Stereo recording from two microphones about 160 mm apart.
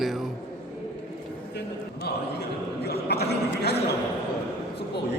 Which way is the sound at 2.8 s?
90° left.